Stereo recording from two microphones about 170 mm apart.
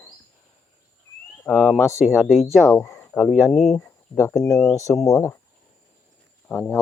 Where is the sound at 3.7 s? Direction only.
15° left (ahead or behind).